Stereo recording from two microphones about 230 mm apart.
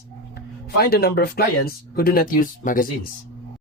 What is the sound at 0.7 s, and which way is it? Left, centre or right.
Speech, left.